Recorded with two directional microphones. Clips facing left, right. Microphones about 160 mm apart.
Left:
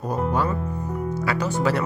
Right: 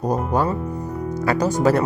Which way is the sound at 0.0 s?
40° right (ahead or behind).